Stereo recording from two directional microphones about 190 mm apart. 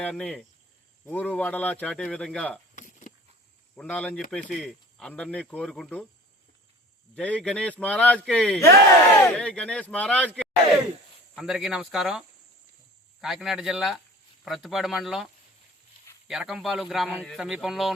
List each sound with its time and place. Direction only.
0.0 s a man's voice: 5° left (ahead or behind)
2.7 s a sound: 40° left (ahead or behind)
3.8 s a man's voice: 5° left (ahead or behind)
7.2 s a man's voice: 5° left (ahead or behind)
8.7 s speech: 15° left (ahead or behind)
9.3 s a man's voice: 5° left (ahead or behind)
11.3 s a man's voice: centre (ahead or behind)
13.2 s a man's voice: centre (ahead or behind)